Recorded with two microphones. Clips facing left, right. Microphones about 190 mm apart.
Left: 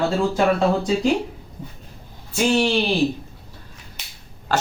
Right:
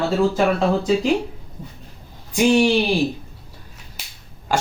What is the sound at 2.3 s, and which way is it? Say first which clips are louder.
Speech: right 3 dB; 15° right (ahead or behind).